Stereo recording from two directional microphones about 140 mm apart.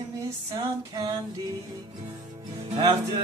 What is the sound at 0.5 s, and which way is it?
Music, 30° right (ahead or behind).